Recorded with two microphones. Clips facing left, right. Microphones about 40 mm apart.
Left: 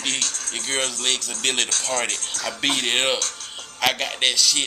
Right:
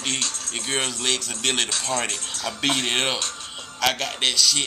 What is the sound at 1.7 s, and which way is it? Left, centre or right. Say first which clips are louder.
Speech: left 1 dB; right.